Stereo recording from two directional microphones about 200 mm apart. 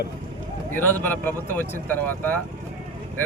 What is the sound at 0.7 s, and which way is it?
Speech, 10° left (ahead or behind).